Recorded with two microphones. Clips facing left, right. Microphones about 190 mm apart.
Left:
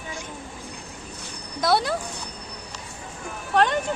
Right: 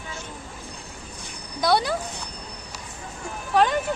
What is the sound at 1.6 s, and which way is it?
Speech, centre (ahead or behind).